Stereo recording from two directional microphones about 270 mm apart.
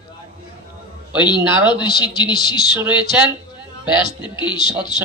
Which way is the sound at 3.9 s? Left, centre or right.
Centre.